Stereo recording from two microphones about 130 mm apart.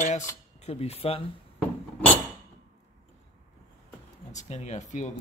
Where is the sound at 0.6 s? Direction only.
50° left (ahead or behind).